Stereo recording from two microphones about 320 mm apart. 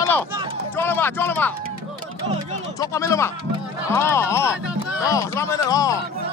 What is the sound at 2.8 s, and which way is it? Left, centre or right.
Speech, centre.